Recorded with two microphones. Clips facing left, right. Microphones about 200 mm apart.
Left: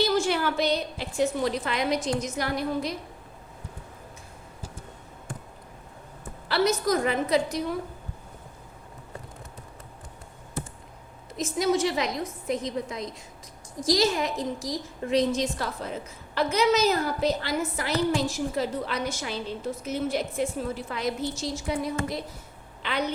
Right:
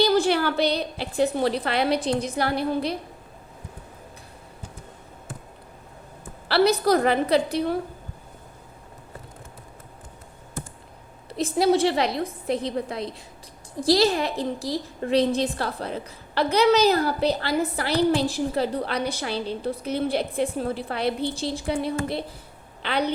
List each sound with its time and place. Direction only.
0.0 s a sound: 35° right (ahead or behind)
0.4 s a woman's voice: 30° right (ahead or behind)
6.8 s a woman's voice: 65° right (ahead or behind)
11.3 s a woman's voice: 35° right (ahead or behind)
20.8 s a woman's voice: 65° right (ahead or behind)
21.1 s a woman's voice: 30° right (ahead or behind)